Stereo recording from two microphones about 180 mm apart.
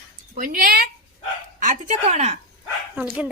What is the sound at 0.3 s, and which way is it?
A woman's voice, 50° right (ahead or behind).